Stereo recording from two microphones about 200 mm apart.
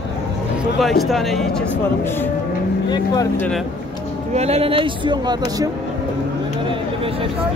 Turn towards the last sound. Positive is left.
turn(degrees=-20)  # may be behind; listen again after turning